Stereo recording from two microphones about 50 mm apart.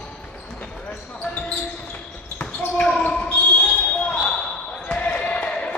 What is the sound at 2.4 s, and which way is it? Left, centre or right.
Basketball bounce, left.